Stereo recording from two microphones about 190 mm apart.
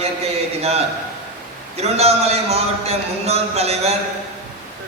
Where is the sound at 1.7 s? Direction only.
35° right (ahead or behind).